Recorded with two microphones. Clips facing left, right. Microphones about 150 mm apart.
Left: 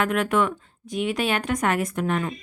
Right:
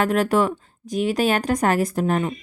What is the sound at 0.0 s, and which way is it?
Speech, 35° right (ahead or behind).